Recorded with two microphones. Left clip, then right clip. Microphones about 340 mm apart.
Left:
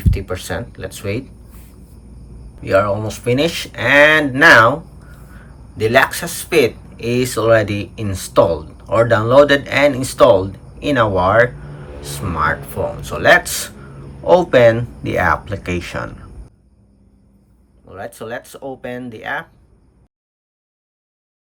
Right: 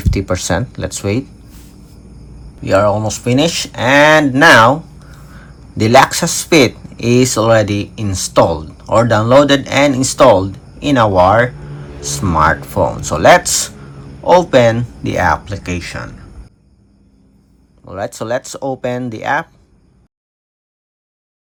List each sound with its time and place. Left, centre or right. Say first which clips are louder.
0.0 s speech: right 6 dB; centre
2.6 s speech: right 3 dB; centre
17.9 s speech: right 8 dB; centre